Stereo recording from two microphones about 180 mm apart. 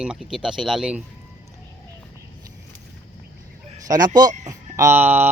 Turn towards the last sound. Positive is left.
turn(degrees=-10)  # may be behind; listen again after turning